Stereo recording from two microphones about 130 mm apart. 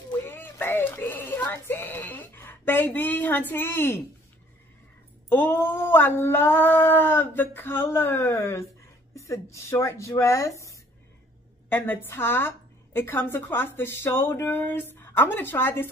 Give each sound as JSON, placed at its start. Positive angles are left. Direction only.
{"t": 0.3, "sound": "speech", "side_deg": 15}
{"t": 5.3, "sound": "a woman's voice", "side_deg": 15}
{"t": 11.7, "sound": "a woman's voice", "side_deg": 15}